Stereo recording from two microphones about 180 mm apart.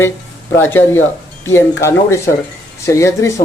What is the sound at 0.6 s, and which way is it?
Speech, 10° left (ahead or behind).